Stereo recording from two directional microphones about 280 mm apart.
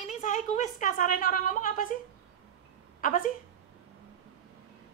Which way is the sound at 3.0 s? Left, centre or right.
Left.